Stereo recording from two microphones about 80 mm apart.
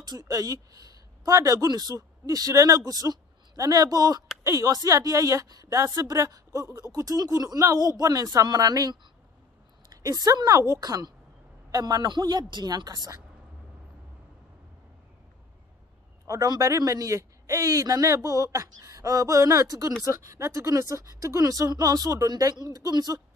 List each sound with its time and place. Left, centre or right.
0.0 s a man's voice: right
16.3 s a man's voice: right